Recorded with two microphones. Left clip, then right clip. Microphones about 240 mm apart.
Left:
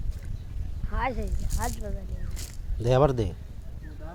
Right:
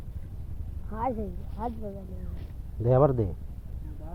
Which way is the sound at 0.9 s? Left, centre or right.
Centre.